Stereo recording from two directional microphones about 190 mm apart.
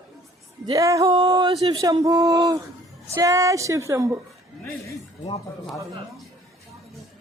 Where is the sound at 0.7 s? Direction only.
15° right (ahead or behind).